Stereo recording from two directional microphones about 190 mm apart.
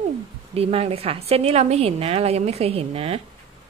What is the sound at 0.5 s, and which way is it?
A woman's voice, 30° right (ahead or behind).